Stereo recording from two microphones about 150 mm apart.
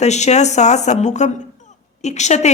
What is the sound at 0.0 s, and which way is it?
Speech, 50° left (ahead or behind).